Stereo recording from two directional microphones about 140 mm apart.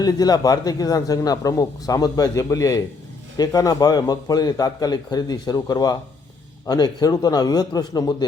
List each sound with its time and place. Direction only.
0.0 s a man's voice: 25° left (ahead or behind)